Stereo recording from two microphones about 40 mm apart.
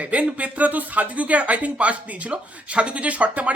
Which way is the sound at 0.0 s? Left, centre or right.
Right.